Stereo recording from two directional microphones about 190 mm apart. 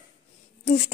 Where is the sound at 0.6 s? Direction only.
35° left (ahead or behind).